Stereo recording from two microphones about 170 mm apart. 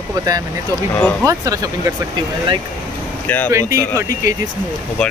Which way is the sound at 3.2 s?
10° left (ahead or behind).